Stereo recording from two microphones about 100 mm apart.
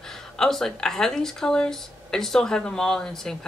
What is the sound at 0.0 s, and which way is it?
A man's voice, 5° left (ahead or behind).